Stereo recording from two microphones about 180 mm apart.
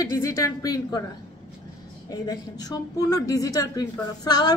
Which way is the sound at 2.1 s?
20° left (ahead or behind).